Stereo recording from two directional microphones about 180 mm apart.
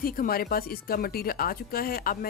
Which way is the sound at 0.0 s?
55° left (ahead or behind).